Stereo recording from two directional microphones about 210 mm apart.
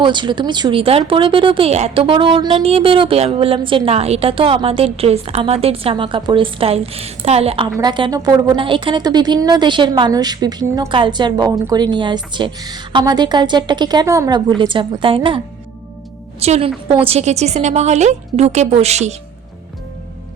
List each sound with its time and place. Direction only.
0.0 s speech: 20° right (ahead or behind)
16.4 s a woman's voice: 30° right (ahead or behind)